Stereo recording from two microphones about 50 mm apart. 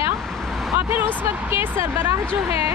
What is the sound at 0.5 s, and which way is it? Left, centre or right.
Vehicle, centre.